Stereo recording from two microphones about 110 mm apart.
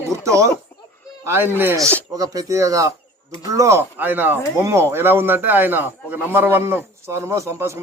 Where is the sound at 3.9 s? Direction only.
15° right (ahead or behind).